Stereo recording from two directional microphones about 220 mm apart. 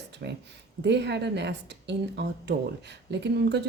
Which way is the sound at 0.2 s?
45° right (ahead or behind).